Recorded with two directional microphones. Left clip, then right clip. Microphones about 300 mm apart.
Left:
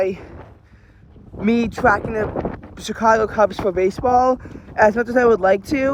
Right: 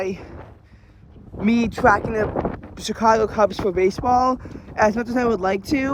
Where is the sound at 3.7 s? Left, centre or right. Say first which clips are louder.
Left 2 dB; centre.